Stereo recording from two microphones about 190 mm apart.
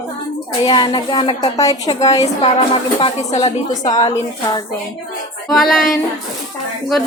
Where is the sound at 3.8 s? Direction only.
20° left (ahead or behind).